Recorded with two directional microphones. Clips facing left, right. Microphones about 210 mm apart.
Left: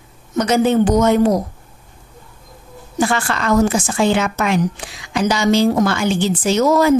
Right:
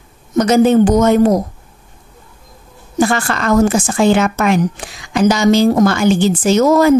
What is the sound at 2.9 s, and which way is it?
A woman's voice, 45° right (ahead or behind).